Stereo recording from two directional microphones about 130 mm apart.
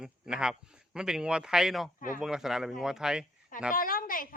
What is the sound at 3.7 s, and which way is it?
Speech, 90° left.